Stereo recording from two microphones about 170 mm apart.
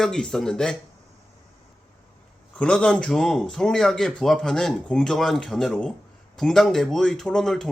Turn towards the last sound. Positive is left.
turn(degrees=5)  # may be behind; listen again after turning